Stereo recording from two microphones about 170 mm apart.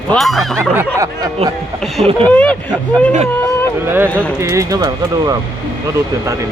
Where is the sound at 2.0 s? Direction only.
35° right (ahead or behind).